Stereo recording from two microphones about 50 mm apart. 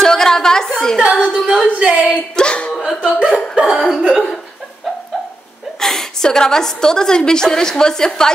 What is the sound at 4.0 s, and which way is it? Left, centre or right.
Speech, centre.